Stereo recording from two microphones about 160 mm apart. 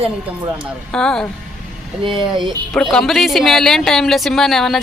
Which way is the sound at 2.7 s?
Centre (ahead or behind).